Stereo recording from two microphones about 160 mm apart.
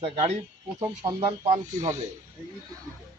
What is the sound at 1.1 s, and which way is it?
Speech, 35° right (ahead or behind).